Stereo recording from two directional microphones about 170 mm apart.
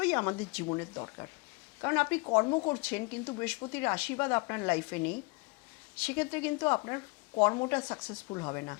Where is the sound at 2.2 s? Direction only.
25° left (ahead or behind).